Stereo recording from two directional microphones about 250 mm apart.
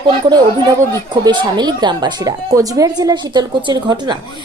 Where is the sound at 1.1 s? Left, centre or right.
Centre.